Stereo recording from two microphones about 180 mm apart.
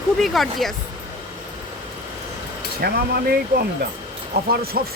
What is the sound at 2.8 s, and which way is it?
Speech, 65° right (ahead or behind).